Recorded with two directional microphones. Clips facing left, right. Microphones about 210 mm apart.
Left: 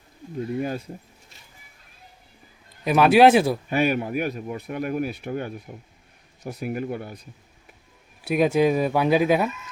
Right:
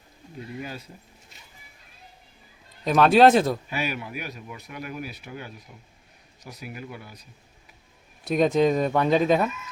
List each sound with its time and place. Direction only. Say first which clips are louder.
0.3 s speech: left 9 dB; 45° left (ahead or behind)
2.8 s speech: left 1 dB; 10° left (ahead or behind)
3.7 s speech: left 8 dB; 50° left (ahead or behind)
8.2 s speech: left 1 dB; 10° left (ahead or behind)